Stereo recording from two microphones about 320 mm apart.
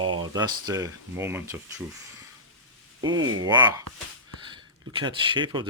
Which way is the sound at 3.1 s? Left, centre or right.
Right.